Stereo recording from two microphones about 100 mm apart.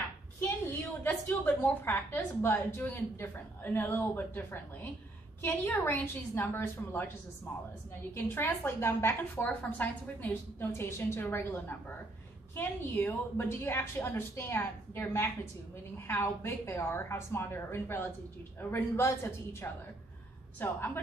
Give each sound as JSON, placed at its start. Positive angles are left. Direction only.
{"t": 0.4, "sound": "a woman's voice", "side_deg": 20}
{"t": 8.1, "sound": "a woman's voice", "side_deg": 20}